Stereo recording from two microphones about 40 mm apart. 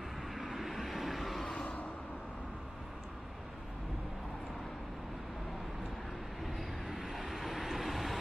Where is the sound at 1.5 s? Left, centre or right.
Left.